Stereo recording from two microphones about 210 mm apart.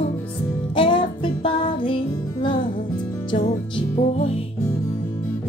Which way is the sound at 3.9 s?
30° left (ahead or behind).